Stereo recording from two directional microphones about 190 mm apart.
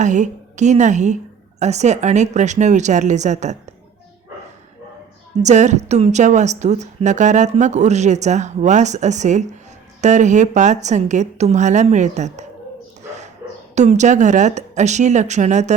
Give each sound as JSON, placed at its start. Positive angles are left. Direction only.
{"t": 0.0, "sound": "a woman's voice", "side_deg": -40}
{"t": 5.4, "sound": "a woman's voice", "side_deg": -40}
{"t": 13.1, "sound": "dog", "side_deg": -35}
{"t": 13.7, "sound": "a woman's voice", "side_deg": -40}